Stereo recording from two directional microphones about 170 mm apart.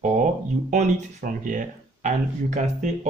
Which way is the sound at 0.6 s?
50° right (ahead or behind).